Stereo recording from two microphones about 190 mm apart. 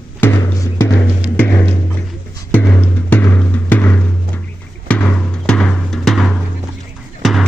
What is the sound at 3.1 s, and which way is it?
Music, 10° left (ahead or behind).